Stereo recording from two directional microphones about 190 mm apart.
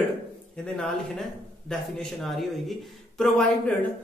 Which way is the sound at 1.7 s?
Centre (ahead or behind).